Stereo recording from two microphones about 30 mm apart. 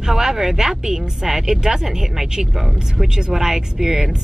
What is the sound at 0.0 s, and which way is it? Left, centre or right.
Speech, centre.